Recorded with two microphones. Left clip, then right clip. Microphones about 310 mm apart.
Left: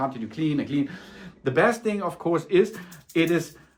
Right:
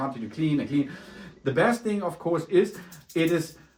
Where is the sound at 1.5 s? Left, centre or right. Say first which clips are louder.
Left 2 dB; left.